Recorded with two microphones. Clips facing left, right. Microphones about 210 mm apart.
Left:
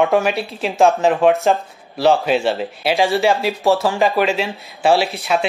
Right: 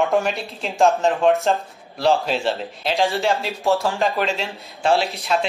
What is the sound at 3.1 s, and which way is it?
Speech, centre (ahead or behind).